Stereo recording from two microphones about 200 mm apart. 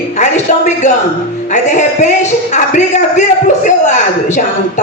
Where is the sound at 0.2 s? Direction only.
35° left (ahead or behind).